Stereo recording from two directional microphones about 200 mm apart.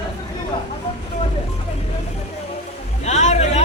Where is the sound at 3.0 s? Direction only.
35° left (ahead or behind).